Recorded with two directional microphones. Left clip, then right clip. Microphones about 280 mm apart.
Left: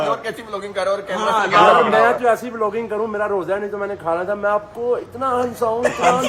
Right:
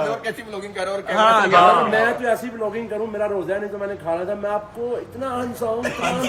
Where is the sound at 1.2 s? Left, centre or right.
Right.